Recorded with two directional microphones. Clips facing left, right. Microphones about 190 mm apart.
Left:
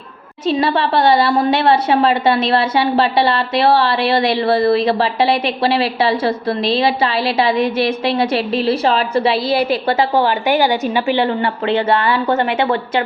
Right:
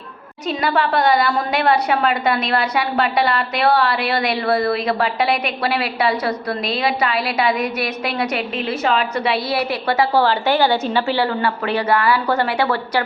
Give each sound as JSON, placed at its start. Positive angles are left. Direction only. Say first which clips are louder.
{"t": 0.4, "sound": "a woman's voice", "louder": "left 4 dB", "side_deg": 25}